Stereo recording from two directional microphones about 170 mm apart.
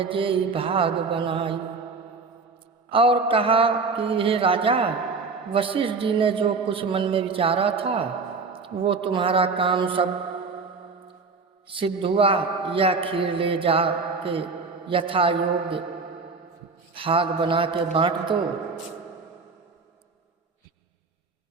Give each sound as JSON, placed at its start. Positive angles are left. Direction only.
{"t": 0.0, "sound": "a man's voice", "side_deg": -30}
{"t": 2.9, "sound": "a man's voice", "side_deg": -30}
{"t": 11.7, "sound": "a man's voice", "side_deg": -30}
{"t": 16.9, "sound": "a man's voice", "side_deg": -30}